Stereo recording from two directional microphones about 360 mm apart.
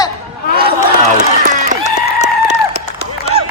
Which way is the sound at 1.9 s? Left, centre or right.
Centre.